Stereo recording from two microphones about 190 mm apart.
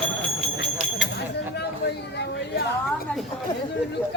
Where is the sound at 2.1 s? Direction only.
60° left (ahead or behind).